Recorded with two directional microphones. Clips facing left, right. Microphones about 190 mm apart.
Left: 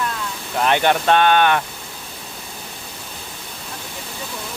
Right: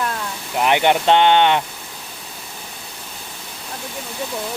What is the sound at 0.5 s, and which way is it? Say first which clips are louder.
Speech: right 1 dB; 15° right (ahead or behind).